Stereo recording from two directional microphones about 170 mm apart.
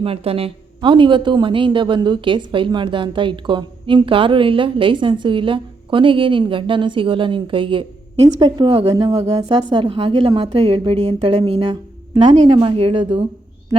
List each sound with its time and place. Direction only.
0.0 s a woman's voice: 35° right (ahead or behind)